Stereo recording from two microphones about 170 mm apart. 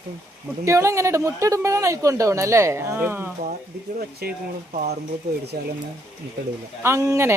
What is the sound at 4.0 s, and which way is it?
Speech, 65° right (ahead or behind).